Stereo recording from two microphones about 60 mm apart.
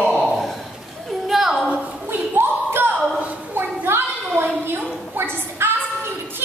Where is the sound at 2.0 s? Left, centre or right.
Right.